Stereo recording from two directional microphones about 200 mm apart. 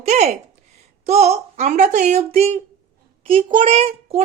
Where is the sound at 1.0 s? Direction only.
35° right (ahead or behind).